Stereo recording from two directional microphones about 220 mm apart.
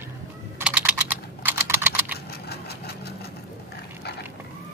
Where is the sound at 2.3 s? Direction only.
45° left (ahead or behind).